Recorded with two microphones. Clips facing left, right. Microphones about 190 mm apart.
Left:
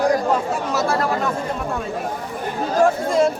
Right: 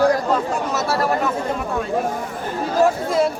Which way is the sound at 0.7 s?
Centre (ahead or behind).